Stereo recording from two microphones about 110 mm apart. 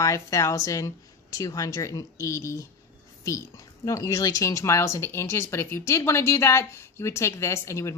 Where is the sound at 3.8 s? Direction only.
30° left (ahead or behind).